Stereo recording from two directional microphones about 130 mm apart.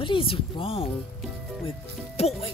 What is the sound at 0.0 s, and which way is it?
Speech, 40° left (ahead or behind).